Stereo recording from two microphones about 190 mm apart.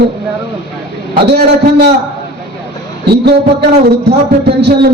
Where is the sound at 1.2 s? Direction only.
60° right (ahead or behind).